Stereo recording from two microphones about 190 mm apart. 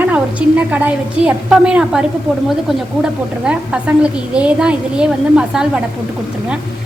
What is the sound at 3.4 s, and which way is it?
A woman's voice, 5° right (ahead or behind).